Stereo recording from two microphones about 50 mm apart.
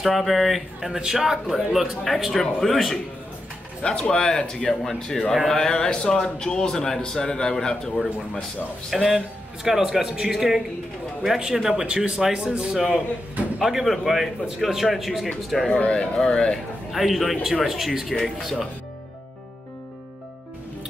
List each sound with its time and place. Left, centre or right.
0.0 s speech: centre
3.8 s speech: left
4.2 s a man's voice: centre
8.9 s speech: centre
15.7 s a man's voice: left
16.9 s speech: centre